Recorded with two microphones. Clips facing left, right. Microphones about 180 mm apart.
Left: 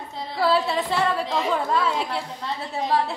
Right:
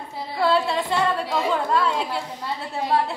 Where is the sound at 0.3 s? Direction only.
Centre (ahead or behind).